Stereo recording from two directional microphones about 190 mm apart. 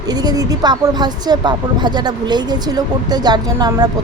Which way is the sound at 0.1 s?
20° right (ahead or behind).